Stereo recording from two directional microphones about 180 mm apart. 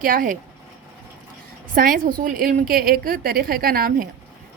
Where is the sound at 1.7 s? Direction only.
50° right (ahead or behind).